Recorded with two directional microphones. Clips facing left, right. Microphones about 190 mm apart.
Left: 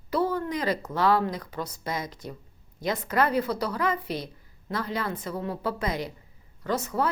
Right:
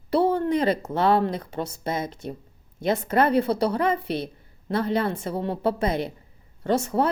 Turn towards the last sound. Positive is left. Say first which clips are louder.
# right 5 dB
turn(degrees=-30)  # may be behind; listen again after turning